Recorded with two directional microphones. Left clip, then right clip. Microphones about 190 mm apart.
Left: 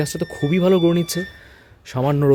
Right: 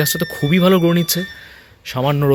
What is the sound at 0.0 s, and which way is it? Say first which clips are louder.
Speech: right 4 dB; 5° left (ahead or behind).